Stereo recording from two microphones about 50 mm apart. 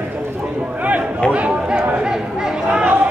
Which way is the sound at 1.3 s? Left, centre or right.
Right.